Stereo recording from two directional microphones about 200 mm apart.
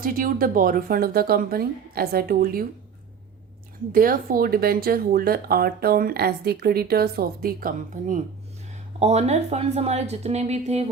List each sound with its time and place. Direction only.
0.0 s speech: 45° right (ahead or behind)
3.9 s a woman's voice: 45° right (ahead or behind)